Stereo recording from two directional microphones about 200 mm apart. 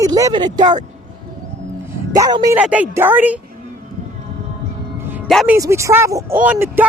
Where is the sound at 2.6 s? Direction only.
5° right (ahead or behind).